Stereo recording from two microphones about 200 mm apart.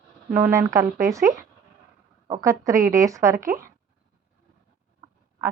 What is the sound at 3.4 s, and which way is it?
Speech, 45° right (ahead or behind).